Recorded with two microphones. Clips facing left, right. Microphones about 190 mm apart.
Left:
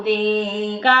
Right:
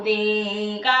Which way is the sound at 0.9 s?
60° left (ahead or behind).